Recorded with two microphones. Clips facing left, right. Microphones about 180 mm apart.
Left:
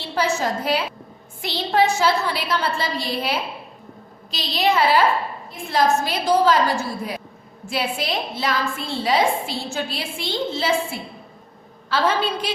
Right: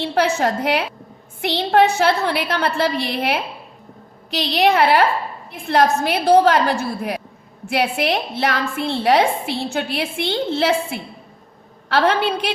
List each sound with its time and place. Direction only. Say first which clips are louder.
0.0 s a woman's voice: right 4 dB; 60° right (ahead or behind)